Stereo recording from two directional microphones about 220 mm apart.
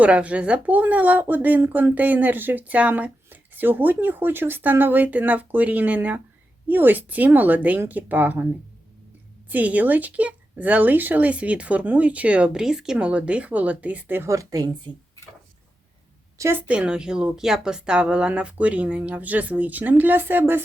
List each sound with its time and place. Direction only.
0.0 s speech: 5° right (ahead or behind)
9.5 s speech: 5° right (ahead or behind)
16.4 s a woman's voice: 10° right (ahead or behind)